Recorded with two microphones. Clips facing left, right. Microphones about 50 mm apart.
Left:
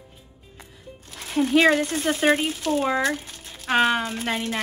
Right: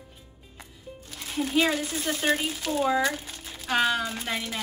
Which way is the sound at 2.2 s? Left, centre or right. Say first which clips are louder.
Left 6 dB; left.